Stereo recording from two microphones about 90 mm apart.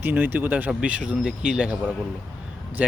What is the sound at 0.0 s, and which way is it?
Speech, 20° right (ahead or behind).